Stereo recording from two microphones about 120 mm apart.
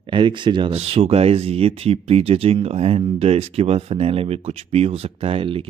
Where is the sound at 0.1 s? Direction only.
40° right (ahead or behind).